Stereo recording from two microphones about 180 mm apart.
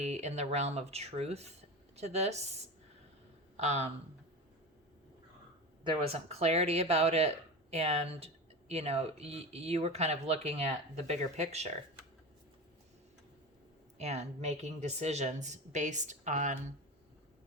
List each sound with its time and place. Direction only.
0.0 s speech: 40° right (ahead or behind)
3.6 s speech: 35° right (ahead or behind)
5.8 s speech: 30° right (ahead or behind)
14.0 s speech: 40° right (ahead or behind)